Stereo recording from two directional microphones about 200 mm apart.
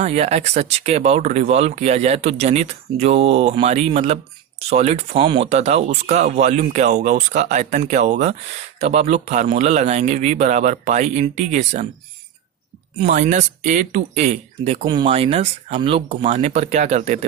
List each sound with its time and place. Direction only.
0.0 s speech: 35° right (ahead or behind)
13.0 s speech: 35° right (ahead or behind)